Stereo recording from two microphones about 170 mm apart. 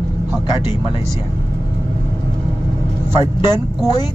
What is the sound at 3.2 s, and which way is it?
Speech, 15° right (ahead or behind).